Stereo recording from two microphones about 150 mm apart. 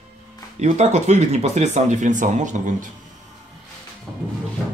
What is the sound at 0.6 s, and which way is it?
Speech, 50° right (ahead or behind).